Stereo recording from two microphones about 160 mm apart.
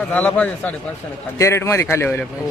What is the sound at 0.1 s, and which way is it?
A man's voice, 10° left (ahead or behind).